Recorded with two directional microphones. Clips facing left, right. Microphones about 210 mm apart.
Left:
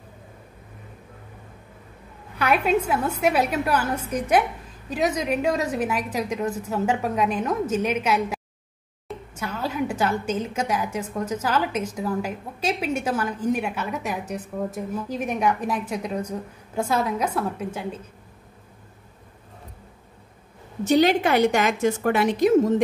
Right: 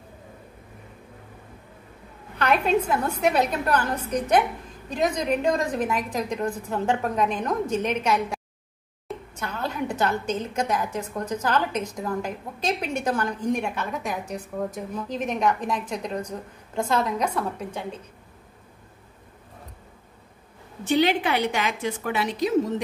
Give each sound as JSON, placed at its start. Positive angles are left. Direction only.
{"t": 2.3, "sound": "a woman's voice", "side_deg": 5}
{"t": 20.8, "sound": "a woman's voice", "side_deg": 40}